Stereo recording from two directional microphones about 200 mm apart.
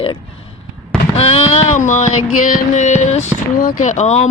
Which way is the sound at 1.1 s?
30° left (ahead or behind).